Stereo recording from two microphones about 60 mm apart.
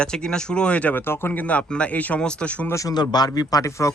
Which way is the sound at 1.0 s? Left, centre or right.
Left.